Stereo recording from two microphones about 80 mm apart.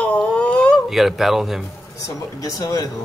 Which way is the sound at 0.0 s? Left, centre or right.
Centre.